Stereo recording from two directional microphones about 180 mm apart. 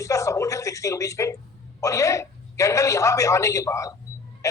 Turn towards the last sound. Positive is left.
turn(degrees=15)  # may be behind; listen again after turning